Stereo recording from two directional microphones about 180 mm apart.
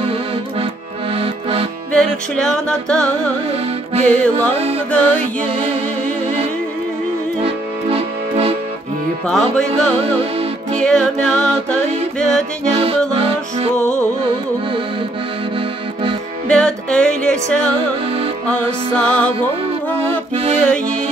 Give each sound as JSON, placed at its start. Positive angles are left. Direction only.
{"t": 1.1, "sound": "accordion", "side_deg": -30}
{"t": 1.9, "sound": "music", "side_deg": 5}
{"t": 4.1, "sound": "music", "side_deg": 10}
{"t": 7.4, "sound": "music", "side_deg": -35}
{"t": 9.3, "sound": "music", "side_deg": 5}
{"t": 13.7, "sound": "music", "side_deg": 40}
{"t": 16.4, "sound": "music", "side_deg": 5}